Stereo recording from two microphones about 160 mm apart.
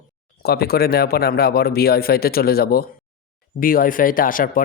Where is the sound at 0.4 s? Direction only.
75° left (ahead or behind).